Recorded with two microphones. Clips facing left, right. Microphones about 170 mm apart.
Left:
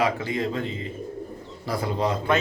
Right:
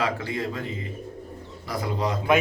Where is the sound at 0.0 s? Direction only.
20° left (ahead or behind).